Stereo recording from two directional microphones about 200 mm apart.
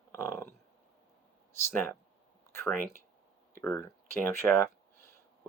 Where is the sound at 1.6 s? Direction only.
10° left (ahead or behind).